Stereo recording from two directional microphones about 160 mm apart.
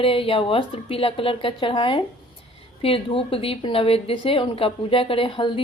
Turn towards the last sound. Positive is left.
turn(degrees=35)  # may be behind; listen again after turning